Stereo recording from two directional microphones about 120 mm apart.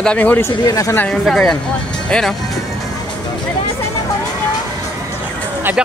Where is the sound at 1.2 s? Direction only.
5° left (ahead or behind).